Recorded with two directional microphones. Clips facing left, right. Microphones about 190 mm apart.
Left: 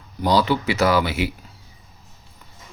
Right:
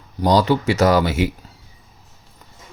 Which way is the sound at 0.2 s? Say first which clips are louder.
Right 3 dB; 40° right (ahead or behind).